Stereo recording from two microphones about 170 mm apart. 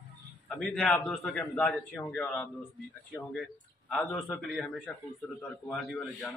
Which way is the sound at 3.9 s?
10° left (ahead or behind).